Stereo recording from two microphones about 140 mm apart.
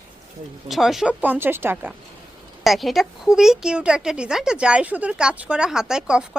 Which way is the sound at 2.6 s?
Centre (ahead or behind).